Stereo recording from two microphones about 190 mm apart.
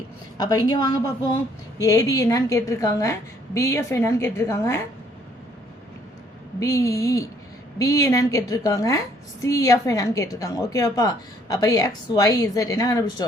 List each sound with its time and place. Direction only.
0.3 s a woman's voice: 20° left (ahead or behind)
6.6 s a woman's voice: 15° left (ahead or behind)